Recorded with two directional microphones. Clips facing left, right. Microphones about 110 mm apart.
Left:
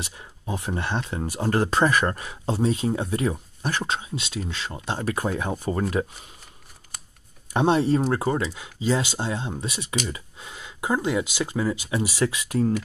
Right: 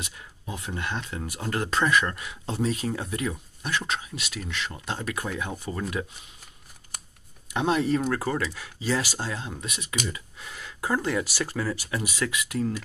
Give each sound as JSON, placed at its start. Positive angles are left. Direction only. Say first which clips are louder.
{"t": 0.0, "sound": "speech", "louder": "left 4 dB", "side_deg": 30}
{"t": 7.5, "sound": "speech", "louder": "left 4 dB", "side_deg": 30}